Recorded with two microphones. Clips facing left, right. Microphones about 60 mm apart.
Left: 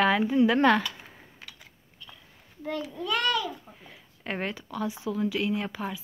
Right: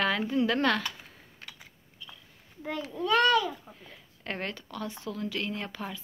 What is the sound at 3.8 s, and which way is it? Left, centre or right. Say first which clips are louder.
Speech: left 3 dB; centre.